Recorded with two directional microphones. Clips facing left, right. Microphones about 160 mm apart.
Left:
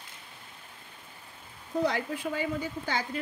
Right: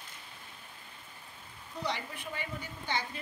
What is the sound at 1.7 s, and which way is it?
Speech, 90° left.